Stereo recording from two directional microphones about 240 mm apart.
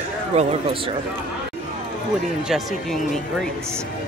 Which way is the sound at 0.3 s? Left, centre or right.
Right.